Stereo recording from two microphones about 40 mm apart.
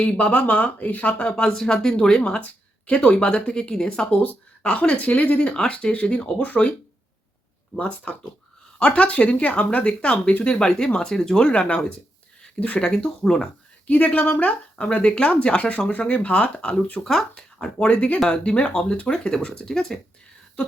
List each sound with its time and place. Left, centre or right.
0.0 s speech: left
1.2 s speech: left
4.1 s speech: left
6.4 s speech: left
7.8 s speech: left; by 11.4 s centre
11.7 s speech: left
12.5 s speech: left
13.2 s speech: centre
13.8 s speech: left
17.0 s speech: centre
17.3 s speech: left
17.8 s speech: left; by 19.9 s centre